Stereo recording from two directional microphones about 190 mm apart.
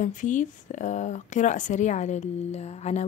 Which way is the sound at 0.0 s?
40° left (ahead or behind).